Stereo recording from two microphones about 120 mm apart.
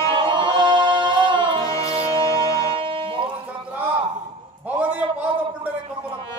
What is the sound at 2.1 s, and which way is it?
Music, 30° left (ahead or behind).